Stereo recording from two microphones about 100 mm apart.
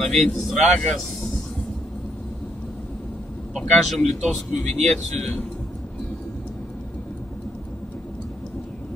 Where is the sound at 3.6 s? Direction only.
5° left (ahead or behind).